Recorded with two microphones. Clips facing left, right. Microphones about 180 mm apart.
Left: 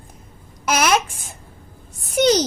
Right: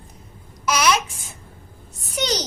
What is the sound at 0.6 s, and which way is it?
Babbling, 50° left (ahead or behind).